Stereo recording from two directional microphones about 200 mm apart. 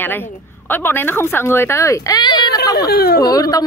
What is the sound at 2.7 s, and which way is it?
Speech, 50° left (ahead or behind).